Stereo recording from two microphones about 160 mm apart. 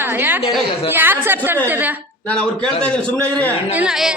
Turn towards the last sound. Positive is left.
turn(degrees=-5)  # may be behind; listen again after turning